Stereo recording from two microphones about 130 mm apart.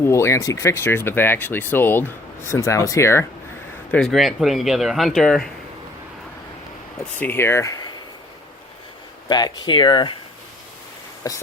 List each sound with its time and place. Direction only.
0.0 s speech: 20° left (ahead or behind)
3.9 s speech: centre (ahead or behind)
7.0 s speech: 15° left (ahead or behind)
9.3 s speech: 35° left (ahead or behind)
11.2 s speech: 25° left (ahead or behind)